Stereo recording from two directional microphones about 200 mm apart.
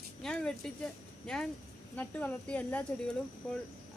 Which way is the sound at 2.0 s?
10° left (ahead or behind).